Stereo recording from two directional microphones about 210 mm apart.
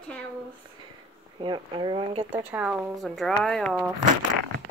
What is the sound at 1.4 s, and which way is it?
Speech, 20° right (ahead or behind).